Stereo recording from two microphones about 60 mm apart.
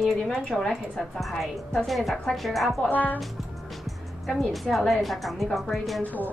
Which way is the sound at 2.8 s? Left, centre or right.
Left.